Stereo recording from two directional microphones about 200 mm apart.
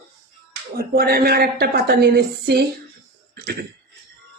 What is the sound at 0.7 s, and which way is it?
A woman's voice, 50° right (ahead or behind).